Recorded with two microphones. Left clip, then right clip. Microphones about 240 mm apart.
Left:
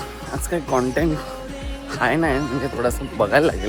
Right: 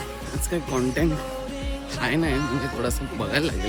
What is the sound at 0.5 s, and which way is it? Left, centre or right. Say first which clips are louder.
Speech: left 5 dB; centre.